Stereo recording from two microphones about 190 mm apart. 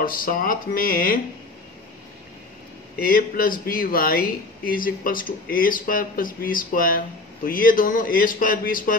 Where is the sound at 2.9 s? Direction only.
50° left (ahead or behind).